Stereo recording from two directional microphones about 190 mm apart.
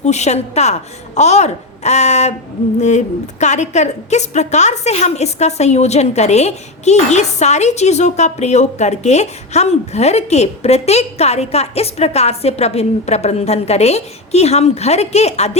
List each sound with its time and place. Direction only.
0.0 s a woman's voice: 35° left (ahead or behind)
3.4 s a woman's voice: 40° left (ahead or behind)